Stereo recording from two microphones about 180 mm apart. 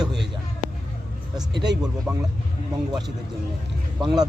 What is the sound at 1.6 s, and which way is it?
Speech, 20° right (ahead or behind).